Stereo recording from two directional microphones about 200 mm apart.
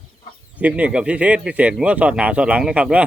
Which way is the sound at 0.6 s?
5° right (ahead or behind).